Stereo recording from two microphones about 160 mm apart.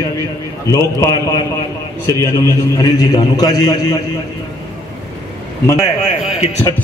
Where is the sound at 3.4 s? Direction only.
25° left (ahead or behind).